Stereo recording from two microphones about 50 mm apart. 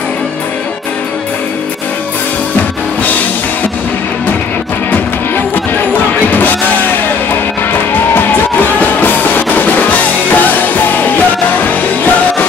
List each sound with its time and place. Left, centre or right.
6.3 s music: left
8.5 s music: left